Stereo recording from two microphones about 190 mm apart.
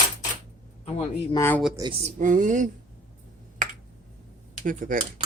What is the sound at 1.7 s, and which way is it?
Speech, 25° right (ahead or behind).